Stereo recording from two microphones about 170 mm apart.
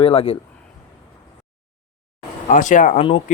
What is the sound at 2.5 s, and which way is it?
Speech, 50° left (ahead or behind).